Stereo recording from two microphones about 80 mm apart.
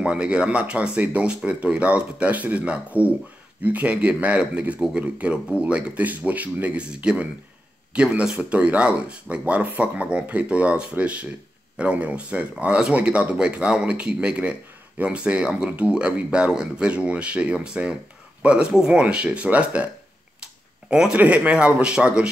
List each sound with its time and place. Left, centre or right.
0.0 s speech: centre
20.9 s speech: centre